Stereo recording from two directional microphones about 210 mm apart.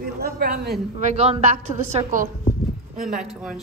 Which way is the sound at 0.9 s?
30° right (ahead or behind).